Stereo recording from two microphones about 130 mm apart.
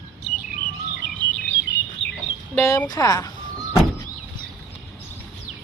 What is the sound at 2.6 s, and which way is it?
Speech, 25° left (ahead or behind).